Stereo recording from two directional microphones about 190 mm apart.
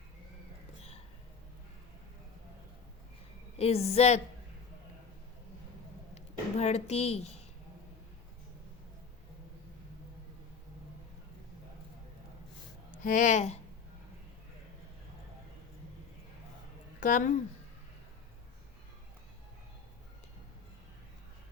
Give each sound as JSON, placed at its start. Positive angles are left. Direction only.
{"t": 3.6, "sound": "speech", "side_deg": 30}
{"t": 6.1, "sound": "a sound", "side_deg": 35}
{"t": 12.9, "sound": "speech", "side_deg": 45}
{"t": 17.0, "sound": "speech", "side_deg": 45}